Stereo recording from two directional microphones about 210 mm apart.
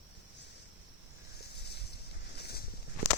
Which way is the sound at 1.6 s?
50° left (ahead or behind).